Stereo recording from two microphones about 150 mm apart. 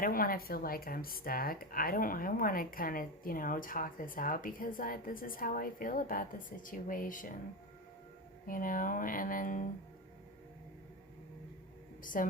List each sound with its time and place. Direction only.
0.0 s speech: 75° left (ahead or behind)
8.4 s speech: 65° left (ahead or behind)
12.1 s speech: 65° left (ahead or behind)